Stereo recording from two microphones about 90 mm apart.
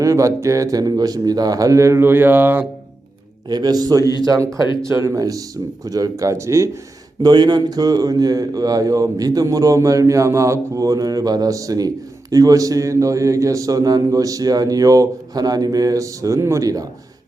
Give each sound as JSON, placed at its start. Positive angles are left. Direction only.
{"t": 0.0, "sound": "a man's voice", "side_deg": -35}
{"t": 3.5, "sound": "speech", "side_deg": -50}
{"t": 5.0, "sound": "a man's voice", "side_deg": -40}
{"t": 7.2, "sound": "a man's voice", "side_deg": -55}